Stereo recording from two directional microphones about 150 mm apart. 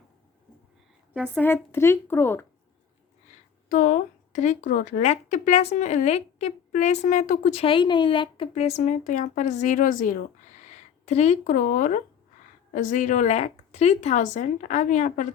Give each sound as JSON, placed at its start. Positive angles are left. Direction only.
{"t": 1.1, "sound": "a woman's voice", "side_deg": -15}
{"t": 1.7, "sound": "speech", "side_deg": 15}
{"t": 3.7, "sound": "speech", "side_deg": 65}
{"t": 7.6, "sound": "a woman's voice", "side_deg": 35}
{"t": 8.5, "sound": "a woman's voice", "side_deg": 45}